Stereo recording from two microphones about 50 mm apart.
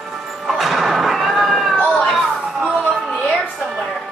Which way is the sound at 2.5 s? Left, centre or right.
Centre.